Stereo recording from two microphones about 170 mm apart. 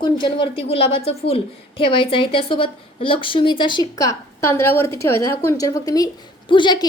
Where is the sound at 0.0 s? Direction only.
30° left (ahead or behind).